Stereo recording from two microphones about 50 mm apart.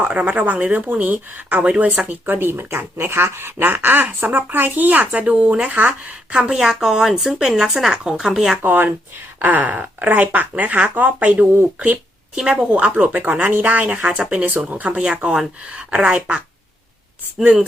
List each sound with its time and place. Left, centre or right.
0.1 s speech: right
5.2 s speech: centre
6.3 s speech: centre
8.6 s speech: right
12.4 s speech: centre
12.7 s speech: right
17.4 s speech: right